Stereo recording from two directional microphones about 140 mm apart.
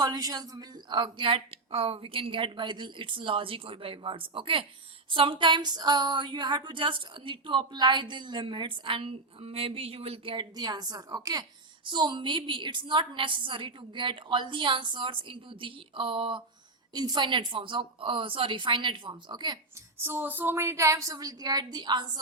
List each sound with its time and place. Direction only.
0.0 s a woman's voice: 25° right (ahead or behind)
20.1 s a woman's voice: 15° right (ahead or behind); by 22.2 s 35° right (ahead or behind)